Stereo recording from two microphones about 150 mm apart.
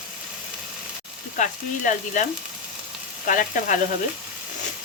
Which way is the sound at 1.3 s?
55° left (ahead or behind).